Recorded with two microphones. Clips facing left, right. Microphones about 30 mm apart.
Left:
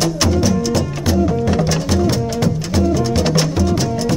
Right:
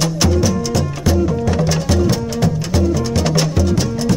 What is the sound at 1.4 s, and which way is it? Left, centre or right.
Music, centre.